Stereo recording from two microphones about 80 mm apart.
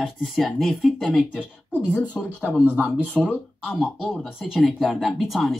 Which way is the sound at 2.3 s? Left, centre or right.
Right.